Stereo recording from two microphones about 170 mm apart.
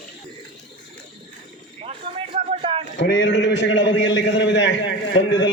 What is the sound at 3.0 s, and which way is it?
A man's voice, 90° left.